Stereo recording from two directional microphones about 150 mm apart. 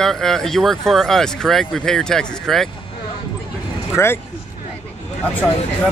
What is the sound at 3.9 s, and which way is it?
Speech, 15° left (ahead or behind).